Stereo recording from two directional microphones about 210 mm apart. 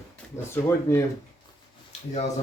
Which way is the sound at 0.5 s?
10° left (ahead or behind).